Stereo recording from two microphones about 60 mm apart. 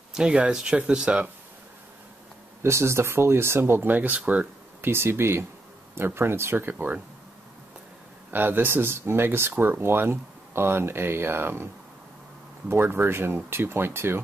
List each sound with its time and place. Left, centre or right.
0.1 s speech: centre
2.6 s speech: right
3.9 s speech: right
4.8 s speech: right
8.3 s speech: right